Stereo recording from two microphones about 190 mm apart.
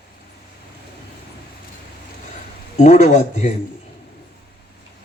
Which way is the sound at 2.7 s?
40° left (ahead or behind).